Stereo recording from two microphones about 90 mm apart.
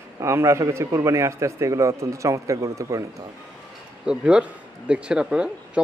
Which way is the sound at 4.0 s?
10° right (ahead or behind).